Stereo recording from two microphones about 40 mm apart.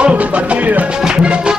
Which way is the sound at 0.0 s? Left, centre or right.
Right.